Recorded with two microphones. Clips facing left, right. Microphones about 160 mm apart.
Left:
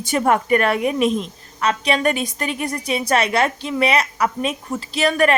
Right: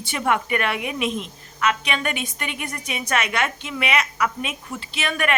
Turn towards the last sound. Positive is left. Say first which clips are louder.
# left 7 dB
turn(degrees=35)  # may be behind; listen again after turning